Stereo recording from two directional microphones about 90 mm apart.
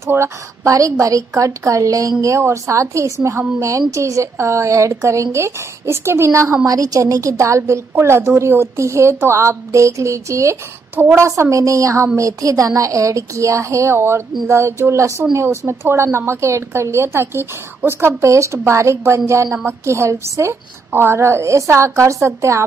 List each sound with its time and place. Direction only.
0.0 s a woman's voice: 30° right (ahead or behind)